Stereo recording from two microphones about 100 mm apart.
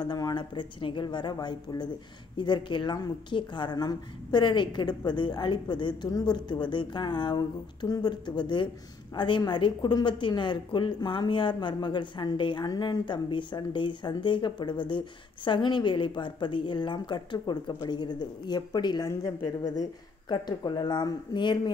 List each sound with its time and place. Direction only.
0.0 s a woman's voice: 45° left (ahead or behind)